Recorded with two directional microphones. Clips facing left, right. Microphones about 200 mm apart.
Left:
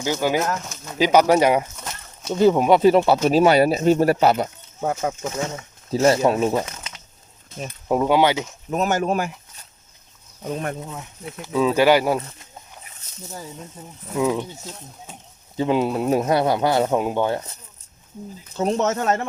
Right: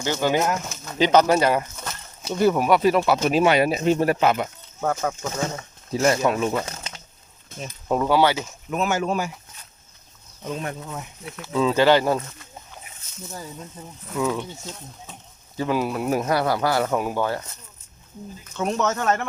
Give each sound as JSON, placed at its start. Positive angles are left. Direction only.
{"t": 0.0, "sound": "speech", "side_deg": 10}
{"t": 4.8, "sound": "speech", "side_deg": 15}
{"t": 5.9, "sound": "speech", "side_deg": 30}
{"t": 6.7, "sound": "a sound", "side_deg": -30}
{"t": 7.9, "sound": "speech", "side_deg": 15}
{"t": 8.7, "sound": "speech", "side_deg": 45}
{"t": 11.4, "sound": "speech", "side_deg": 10}
{"t": 13.8, "sound": "speech", "side_deg": 10}
{"t": 15.5, "sound": "speech", "side_deg": 20}
{"t": 18.5, "sound": "speech", "side_deg": 30}